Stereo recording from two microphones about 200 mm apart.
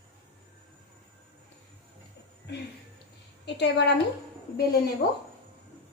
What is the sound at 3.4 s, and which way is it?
Speech, 60° left (ahead or behind).